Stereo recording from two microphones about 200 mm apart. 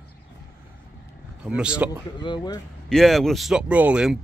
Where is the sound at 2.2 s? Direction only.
20° left (ahead or behind).